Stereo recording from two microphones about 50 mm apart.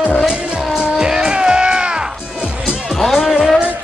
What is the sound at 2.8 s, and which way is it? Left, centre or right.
Music, centre.